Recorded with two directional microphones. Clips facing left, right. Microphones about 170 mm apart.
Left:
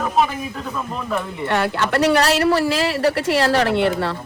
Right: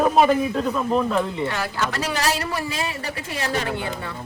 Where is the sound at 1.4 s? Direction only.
65° left (ahead or behind).